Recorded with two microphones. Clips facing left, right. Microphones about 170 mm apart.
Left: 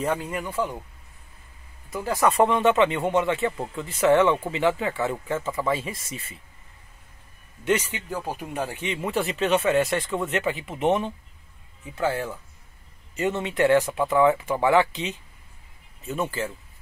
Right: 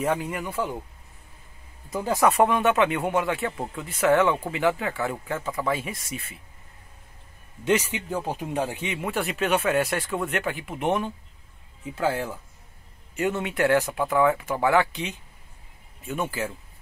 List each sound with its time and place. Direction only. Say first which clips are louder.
0.0 s speech: right 1 dB; 10° right (ahead or behind)
1.9 s speech: right 1 dB; 20° right (ahead or behind)
2.4 s speech: left 1 dB; 5° right (ahead or behind)
7.6 s speech: right 1 dB; 15° right (ahead or behind)
9.0 s speech: left 2 dB; centre (ahead or behind)
12.0 s speech: even; 10° right (ahead or behind)
16.1 s speech: left 1 dB; 5° right (ahead or behind)